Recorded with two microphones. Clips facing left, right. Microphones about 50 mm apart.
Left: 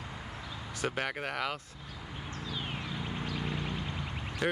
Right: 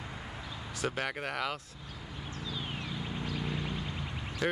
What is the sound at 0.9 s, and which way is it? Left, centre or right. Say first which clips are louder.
Speech: even; centre.